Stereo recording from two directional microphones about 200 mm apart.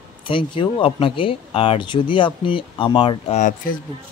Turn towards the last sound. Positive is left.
turn(degrees=40)  # may be behind; listen again after turning